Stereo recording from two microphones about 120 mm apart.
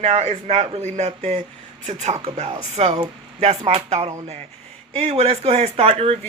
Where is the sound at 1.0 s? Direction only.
70° right (ahead or behind).